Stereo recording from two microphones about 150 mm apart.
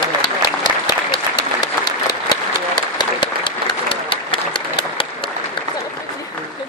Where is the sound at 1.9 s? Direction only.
30° left (ahead or behind).